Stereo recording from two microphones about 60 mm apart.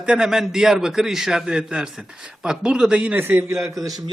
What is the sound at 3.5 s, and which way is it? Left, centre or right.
Speech, right.